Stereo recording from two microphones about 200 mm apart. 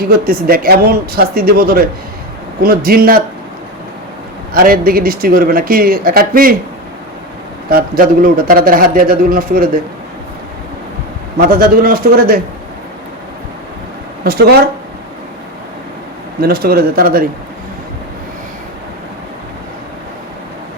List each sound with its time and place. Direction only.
0.0 s speech: 50° right (ahead or behind)
4.5 s speech: 45° right (ahead or behind)
7.7 s speech: 45° right (ahead or behind)
11.3 s speech: 45° right (ahead or behind)
14.3 s speech: 50° right (ahead or behind)
16.4 s speech: 50° right (ahead or behind)